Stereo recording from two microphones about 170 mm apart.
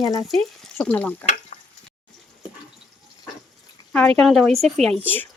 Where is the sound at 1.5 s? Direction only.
50° left (ahead or behind).